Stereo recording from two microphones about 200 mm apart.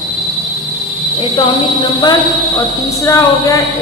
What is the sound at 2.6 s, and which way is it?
A woman's voice, 15° left (ahead or behind).